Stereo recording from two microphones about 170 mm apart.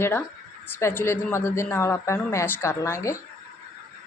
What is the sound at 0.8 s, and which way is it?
A woman's voice, 15° left (ahead or behind).